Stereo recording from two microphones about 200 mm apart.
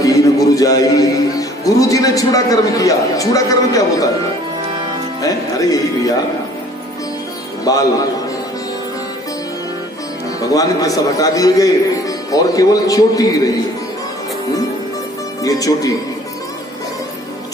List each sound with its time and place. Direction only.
0.0 s a man's voice: 15° left (ahead or behind)
5.2 s a man's voice: 15° left (ahead or behind)
7.6 s a man's voice: 20° left (ahead or behind)
10.4 s a man's voice: 15° left (ahead or behind)
15.4 s a man's voice: 15° left (ahead or behind)